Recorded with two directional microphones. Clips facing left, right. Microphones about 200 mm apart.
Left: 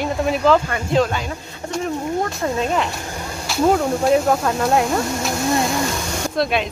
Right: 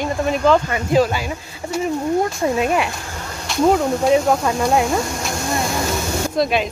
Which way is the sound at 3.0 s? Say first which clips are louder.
Left 2 dB; 15° left (ahead or behind).